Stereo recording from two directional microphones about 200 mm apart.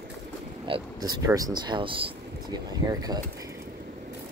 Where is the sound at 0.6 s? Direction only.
25° right (ahead or behind).